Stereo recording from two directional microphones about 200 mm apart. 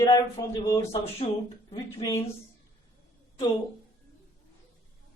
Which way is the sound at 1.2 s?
35° left (ahead or behind).